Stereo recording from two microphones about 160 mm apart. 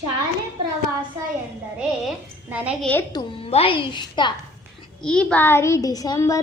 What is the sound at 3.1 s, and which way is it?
A woman's voice, 30° left (ahead or behind).